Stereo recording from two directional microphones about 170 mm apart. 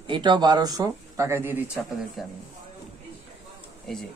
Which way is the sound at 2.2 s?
Centre (ahead or behind).